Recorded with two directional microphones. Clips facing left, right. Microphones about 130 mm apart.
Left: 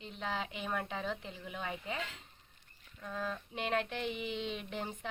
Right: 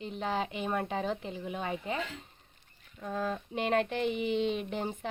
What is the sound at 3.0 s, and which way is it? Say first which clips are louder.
Speech: right 6 dB; 40° right (ahead or behind).